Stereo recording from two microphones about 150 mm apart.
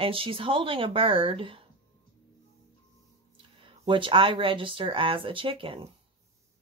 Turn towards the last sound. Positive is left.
turn(degrees=-35)  # may be behind; listen again after turning